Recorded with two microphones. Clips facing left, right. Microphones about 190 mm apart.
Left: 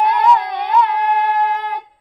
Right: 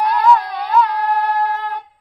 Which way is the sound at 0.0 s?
20° left (ahead or behind).